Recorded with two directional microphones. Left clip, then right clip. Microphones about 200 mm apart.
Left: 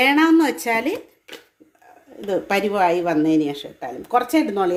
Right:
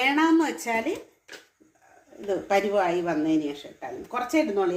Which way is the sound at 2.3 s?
60° left (ahead or behind).